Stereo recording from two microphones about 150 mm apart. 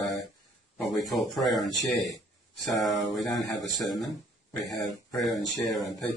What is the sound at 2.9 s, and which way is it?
Speech, centre (ahead or behind).